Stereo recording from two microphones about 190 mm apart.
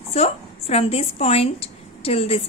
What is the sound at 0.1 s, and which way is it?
A woman's voice, 35° left (ahead or behind).